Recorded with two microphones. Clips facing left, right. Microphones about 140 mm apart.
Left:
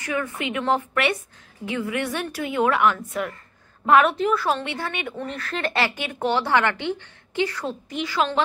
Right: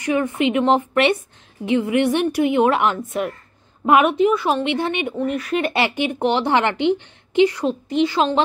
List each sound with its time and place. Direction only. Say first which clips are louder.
0.0 s a woman's voice: right 8 dB; 25° right (ahead or behind)
3.8 s a woman's voice: right 3 dB; 10° right (ahead or behind); by 8.4 s 25° right (ahead or behind)